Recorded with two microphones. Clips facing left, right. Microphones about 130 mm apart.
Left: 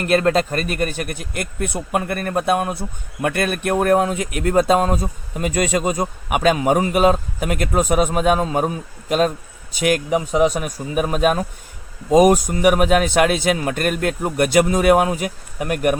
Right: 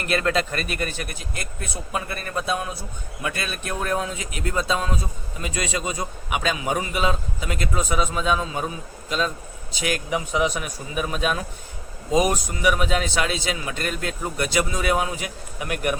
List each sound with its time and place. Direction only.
0.0 s a man's voice: 40° left (ahead or behind)